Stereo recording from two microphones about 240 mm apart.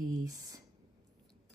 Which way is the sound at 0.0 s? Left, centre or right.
Centre.